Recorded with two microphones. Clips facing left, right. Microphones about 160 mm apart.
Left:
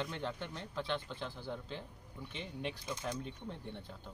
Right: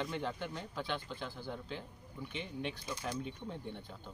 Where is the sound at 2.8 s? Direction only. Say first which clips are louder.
Even; 20° left (ahead or behind).